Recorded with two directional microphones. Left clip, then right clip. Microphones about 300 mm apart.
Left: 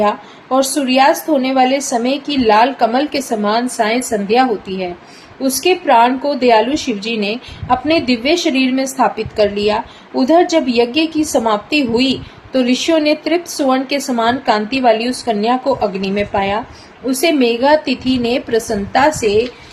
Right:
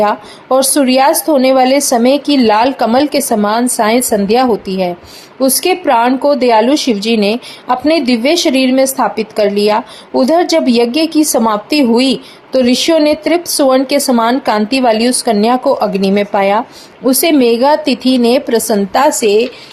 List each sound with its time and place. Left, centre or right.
0.0 s a woman's voice: right